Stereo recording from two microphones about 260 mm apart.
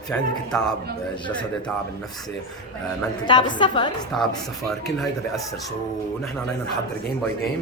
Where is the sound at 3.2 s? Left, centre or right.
Centre.